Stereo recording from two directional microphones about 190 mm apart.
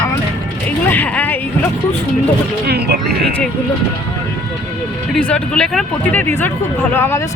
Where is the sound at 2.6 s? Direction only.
55° right (ahead or behind).